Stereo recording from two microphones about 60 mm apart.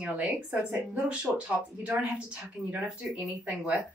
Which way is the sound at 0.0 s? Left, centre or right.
Right.